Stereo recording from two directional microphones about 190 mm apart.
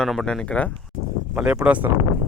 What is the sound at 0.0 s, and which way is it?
Speech, centre (ahead or behind).